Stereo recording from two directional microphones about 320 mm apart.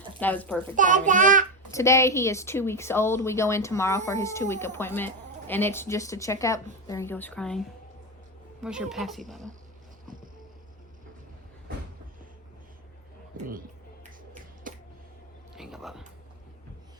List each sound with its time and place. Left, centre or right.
0.2 s speech: centre
0.8 s a child's voice: right
1.7 s speech: centre
8.6 s speech: centre
14.7 s a sound: right
15.5 s a sound: centre